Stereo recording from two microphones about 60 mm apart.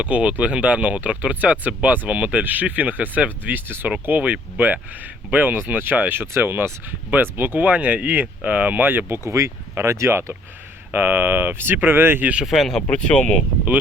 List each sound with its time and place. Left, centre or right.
0.0 s speech: right
10.9 s speech: right
12.2 s speech: centre
12.5 s speech: centre
12.9 s speech: centre